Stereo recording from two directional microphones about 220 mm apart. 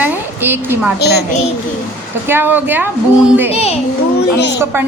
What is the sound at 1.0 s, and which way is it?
Speech, 45° left (ahead or behind).